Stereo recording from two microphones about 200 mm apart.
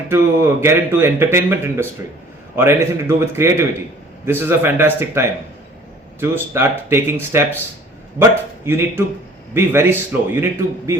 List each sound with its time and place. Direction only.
0.1 s speech: 10° right (ahead or behind)